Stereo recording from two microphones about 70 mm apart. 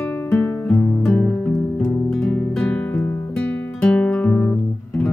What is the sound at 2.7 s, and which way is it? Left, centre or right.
Guitar, centre.